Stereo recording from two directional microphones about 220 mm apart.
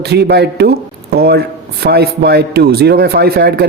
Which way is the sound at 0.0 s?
45° right (ahead or behind).